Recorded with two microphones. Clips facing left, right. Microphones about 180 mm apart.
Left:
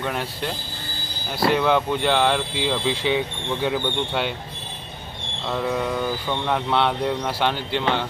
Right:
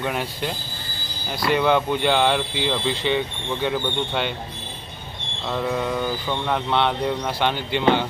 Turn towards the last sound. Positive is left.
turn(degrees=0)  # may be behind; listen again after turning